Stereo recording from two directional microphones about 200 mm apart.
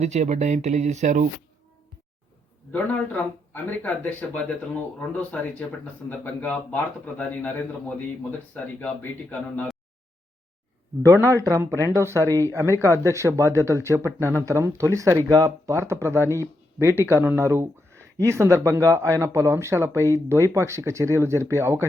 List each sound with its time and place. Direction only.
0.0 s speech: 35° right (ahead or behind)
2.7 s speech: 10° left (ahead or behind)
11.0 s speech: 15° right (ahead or behind)